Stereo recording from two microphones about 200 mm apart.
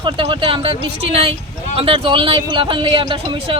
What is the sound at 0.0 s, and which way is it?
Speech, 25° right (ahead or behind).